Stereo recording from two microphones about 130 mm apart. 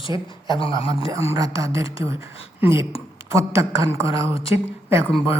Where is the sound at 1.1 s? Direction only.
25° right (ahead or behind).